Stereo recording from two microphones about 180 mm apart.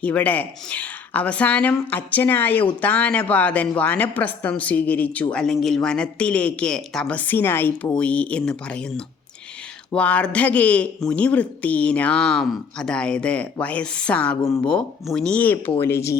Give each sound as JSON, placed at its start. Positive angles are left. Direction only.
{"t": 0.0, "sound": "a woman's voice", "side_deg": 10}